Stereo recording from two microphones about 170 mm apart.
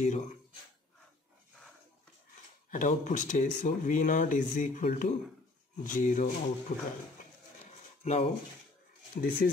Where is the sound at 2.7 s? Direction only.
50° left (ahead or behind).